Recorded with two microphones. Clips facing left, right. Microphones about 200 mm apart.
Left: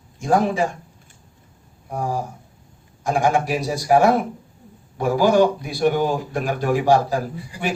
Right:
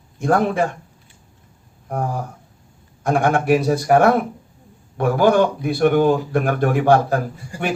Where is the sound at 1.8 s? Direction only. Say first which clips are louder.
Right 1 dB; 60° right (ahead or behind).